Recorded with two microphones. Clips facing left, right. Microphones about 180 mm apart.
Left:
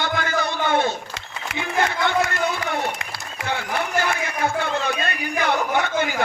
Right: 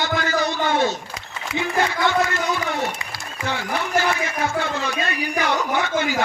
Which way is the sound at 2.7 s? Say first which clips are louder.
Even; 60° left (ahead or behind).